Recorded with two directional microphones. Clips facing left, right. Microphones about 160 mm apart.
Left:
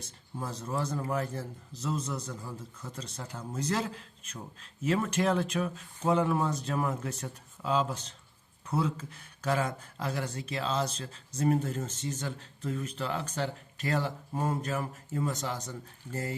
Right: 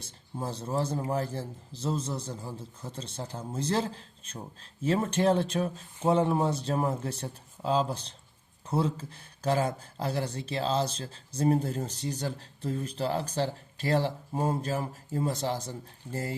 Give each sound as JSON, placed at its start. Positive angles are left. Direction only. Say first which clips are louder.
{"t": 0.0, "sound": "speech", "louder": "right 3 dB", "side_deg": -30}
{"t": 16.1, "sound": "speech", "louder": "right 2 dB", "side_deg": -10}